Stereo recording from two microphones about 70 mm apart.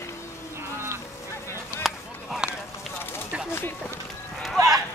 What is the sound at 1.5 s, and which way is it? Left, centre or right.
Chop, left.